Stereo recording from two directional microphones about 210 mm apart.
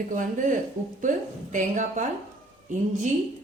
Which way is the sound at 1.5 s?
35° right (ahead or behind).